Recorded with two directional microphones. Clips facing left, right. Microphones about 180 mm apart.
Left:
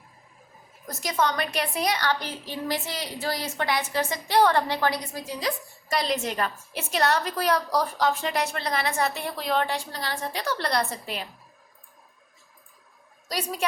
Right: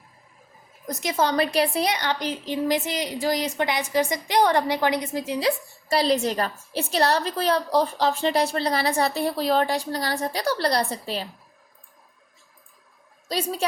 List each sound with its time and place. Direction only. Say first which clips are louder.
0.9 s a woman's voice: right 2 dB; 20° right (ahead or behind)
1.9 s a woman's voice: right 1 dB; 20° right (ahead or behind)
13.2 s a child's voice: right 3 dB; 30° right (ahead or behind)